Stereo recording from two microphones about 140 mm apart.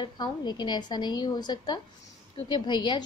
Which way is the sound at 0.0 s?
30° left (ahead or behind).